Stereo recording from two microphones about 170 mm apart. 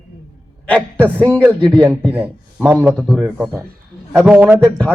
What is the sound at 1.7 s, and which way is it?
Speech, 25° right (ahead or behind).